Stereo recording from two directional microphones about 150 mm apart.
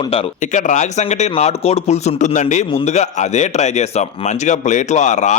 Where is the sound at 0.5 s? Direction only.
55° left (ahead or behind).